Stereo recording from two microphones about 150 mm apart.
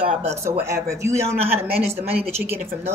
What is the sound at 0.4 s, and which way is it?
Speech, 15° right (ahead or behind).